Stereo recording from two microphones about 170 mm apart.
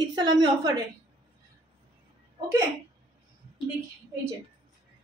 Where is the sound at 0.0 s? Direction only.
25° right (ahead or behind).